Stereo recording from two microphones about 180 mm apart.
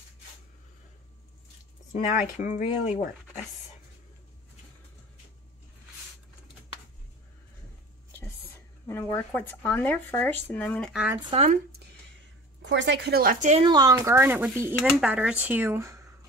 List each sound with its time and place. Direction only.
2.4 s speech: 40° left (ahead or behind)
8.8 s speech: 15° left (ahead or behind)
11.2 s speech: 35° right (ahead or behind)
12.6 s speech: 75° right (ahead or behind); by 13.7 s 40° right (ahead or behind)
13.7 s speech: 20° right (ahead or behind)